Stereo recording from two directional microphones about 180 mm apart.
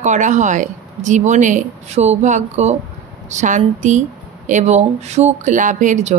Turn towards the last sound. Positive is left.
turn(degrees=-40)  # may be behind; listen again after turning